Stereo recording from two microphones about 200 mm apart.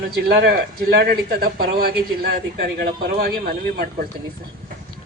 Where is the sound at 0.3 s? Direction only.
50° right (ahead or behind).